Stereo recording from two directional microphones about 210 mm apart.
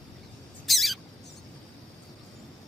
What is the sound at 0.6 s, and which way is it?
Bird, centre (ahead or behind).